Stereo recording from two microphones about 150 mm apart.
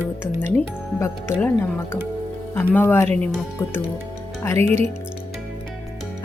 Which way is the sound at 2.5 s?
10° left (ahead or behind).